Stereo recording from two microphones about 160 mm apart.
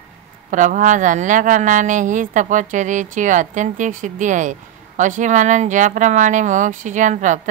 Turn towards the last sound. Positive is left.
turn(degrees=-50)  # may be behind; listen again after turning